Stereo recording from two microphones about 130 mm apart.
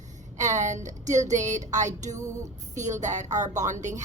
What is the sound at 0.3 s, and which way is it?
A woman's voice, 65° right (ahead or behind).